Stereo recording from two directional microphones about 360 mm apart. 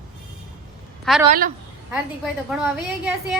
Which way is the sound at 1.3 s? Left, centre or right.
Right.